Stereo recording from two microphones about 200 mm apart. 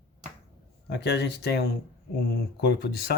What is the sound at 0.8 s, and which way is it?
Speech, 55° left (ahead or behind).